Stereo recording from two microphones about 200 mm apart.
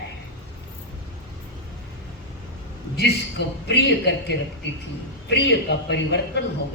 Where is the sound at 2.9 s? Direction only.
60° left (ahead or behind).